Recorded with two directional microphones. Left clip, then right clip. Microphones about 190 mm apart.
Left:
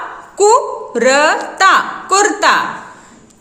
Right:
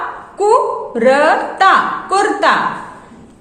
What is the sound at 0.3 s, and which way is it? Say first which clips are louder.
A woman's voice: left 1 dB; 35° left (ahead or behind).